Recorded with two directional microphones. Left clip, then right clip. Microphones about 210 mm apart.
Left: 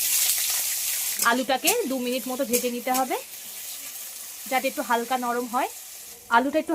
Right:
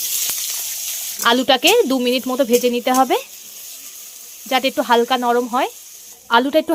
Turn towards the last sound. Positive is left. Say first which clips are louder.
# right 7 dB
turn(degrees=-50)  # may be behind; listen again after turning